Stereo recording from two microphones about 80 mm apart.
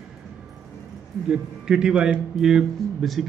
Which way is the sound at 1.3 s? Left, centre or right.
Centre.